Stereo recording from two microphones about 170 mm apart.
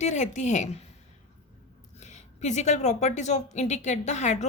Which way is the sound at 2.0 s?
45° left (ahead or behind).